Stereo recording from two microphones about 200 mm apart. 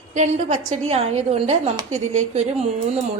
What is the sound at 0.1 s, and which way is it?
A woman's voice, 35° right (ahead or behind).